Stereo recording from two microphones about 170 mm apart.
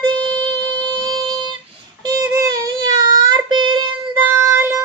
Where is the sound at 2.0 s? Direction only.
20° right (ahead or behind).